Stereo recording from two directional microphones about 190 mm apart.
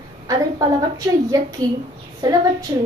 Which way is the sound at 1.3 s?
20° right (ahead or behind).